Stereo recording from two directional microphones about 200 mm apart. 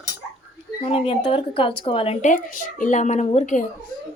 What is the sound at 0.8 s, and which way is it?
Speech, 30° left (ahead or behind).